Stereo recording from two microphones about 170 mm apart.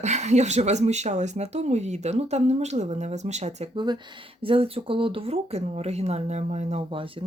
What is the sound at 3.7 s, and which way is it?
Speech, 25° right (ahead or behind).